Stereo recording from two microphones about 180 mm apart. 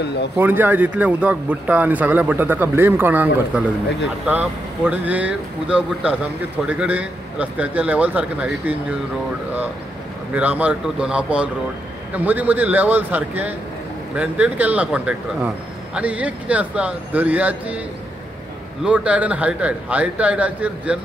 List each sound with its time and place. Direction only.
0.0 s speech: 70° left (ahead or behind)
0.4 s a man's voice: 10° right (ahead or behind)
10.3 s a man's voice: 10° right (ahead or behind)
18.9 s a man's voice: 5° right (ahead or behind)